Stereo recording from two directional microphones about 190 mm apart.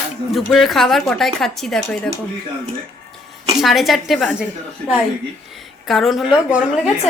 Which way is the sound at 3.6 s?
Centre (ahead or behind).